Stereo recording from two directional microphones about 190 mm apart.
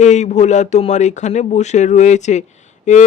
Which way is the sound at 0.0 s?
35° left (ahead or behind).